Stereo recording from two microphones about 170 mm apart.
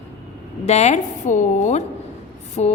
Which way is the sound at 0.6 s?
40° left (ahead or behind).